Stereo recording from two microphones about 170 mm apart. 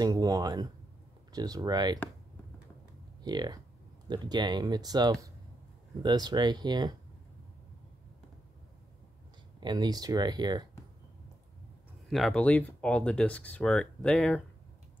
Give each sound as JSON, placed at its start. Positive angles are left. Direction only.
{"t": 0.0, "sound": "speech", "side_deg": -25}
{"t": 3.3, "sound": "speech", "side_deg": -25}
{"t": 9.6, "sound": "speech", "side_deg": -25}
{"t": 12.1, "sound": "speech", "side_deg": 5}